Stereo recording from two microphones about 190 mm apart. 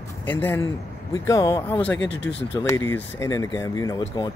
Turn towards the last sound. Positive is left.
turn(degrees=20)  # may be behind; listen again after turning